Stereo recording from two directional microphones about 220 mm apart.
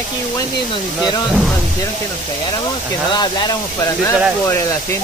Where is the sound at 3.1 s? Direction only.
20° left (ahead or behind).